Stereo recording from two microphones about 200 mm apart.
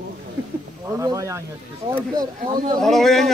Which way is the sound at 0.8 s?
15° right (ahead or behind).